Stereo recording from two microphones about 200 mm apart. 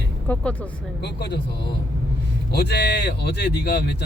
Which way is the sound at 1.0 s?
60° left (ahead or behind).